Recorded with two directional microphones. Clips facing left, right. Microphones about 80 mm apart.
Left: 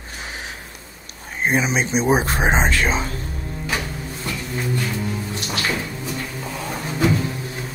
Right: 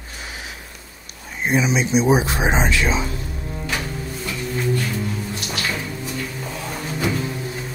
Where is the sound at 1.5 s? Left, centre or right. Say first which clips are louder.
Right 1 dB; left.